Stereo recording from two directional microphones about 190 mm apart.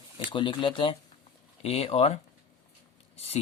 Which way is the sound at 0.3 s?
25° left (ahead or behind).